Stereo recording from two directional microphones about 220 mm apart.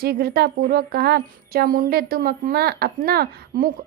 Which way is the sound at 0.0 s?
45° right (ahead or behind).